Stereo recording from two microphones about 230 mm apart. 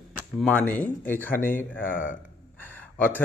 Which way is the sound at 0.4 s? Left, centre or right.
Centre.